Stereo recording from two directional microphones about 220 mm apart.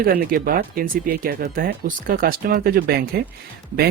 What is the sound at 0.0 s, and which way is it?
Speech, 40° right (ahead or behind).